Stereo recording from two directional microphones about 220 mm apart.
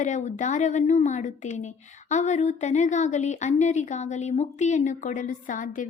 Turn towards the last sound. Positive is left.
turn(degrees=35)  # may be behind; listen again after turning